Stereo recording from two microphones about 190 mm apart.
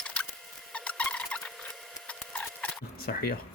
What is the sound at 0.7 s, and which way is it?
Insect, 5° left (ahead or behind).